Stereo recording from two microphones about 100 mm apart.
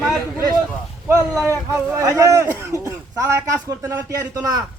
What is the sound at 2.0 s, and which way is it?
A man's voice, 35° right (ahead or behind).